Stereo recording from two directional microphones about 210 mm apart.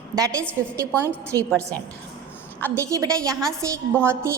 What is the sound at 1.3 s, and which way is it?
Speech, 10° left (ahead or behind).